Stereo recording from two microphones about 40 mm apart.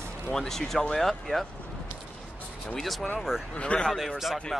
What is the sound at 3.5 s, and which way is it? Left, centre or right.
Speech, left.